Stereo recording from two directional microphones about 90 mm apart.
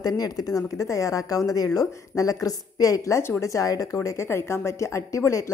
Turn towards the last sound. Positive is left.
turn(degrees=35)  # may be behind; listen again after turning